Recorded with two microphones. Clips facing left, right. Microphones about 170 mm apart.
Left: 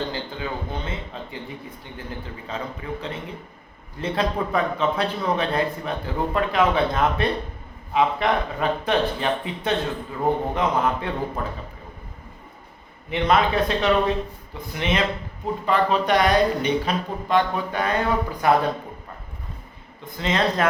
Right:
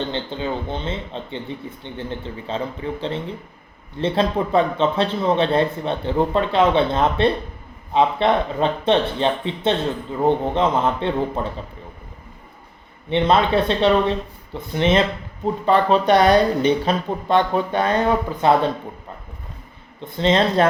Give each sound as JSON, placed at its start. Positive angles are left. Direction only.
{"t": 0.0, "sound": "speech", "side_deg": -25}
{"t": 13.1, "sound": "speech", "side_deg": -30}
{"t": 20.1, "sound": "speech", "side_deg": -30}